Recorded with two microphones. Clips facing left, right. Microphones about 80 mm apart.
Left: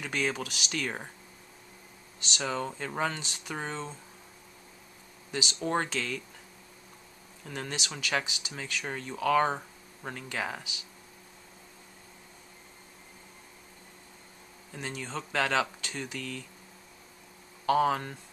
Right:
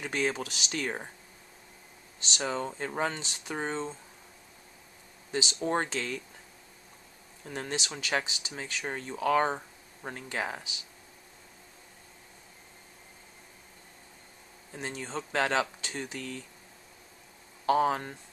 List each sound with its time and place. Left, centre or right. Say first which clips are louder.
0.0 s speech: right 1 dB; right
2.1 s speech: even; right
5.3 s speech: right 1 dB; right
7.4 s speech: right 2 dB; right
14.7 s speech: even; right
17.6 s speech: even; right